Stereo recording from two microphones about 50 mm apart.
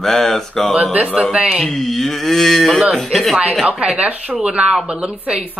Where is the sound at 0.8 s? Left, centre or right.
Right.